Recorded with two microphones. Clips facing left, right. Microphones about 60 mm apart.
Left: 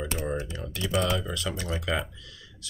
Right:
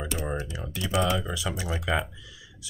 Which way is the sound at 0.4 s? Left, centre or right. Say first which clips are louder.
Even; centre.